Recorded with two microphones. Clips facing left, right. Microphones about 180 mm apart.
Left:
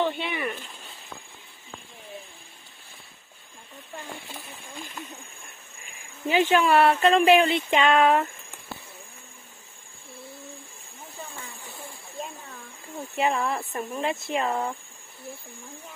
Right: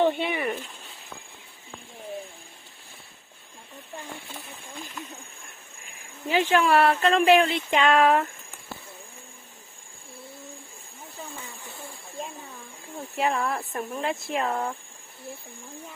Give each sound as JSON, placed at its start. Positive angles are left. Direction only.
{"t": 0.0, "sound": "a sound", "side_deg": -50}
{"t": 6.2, "sound": "speech", "side_deg": 0}
{"t": 13.1, "sound": "speech", "side_deg": 0}